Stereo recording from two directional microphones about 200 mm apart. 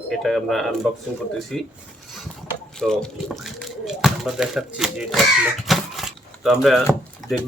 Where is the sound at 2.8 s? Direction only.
5° left (ahead or behind).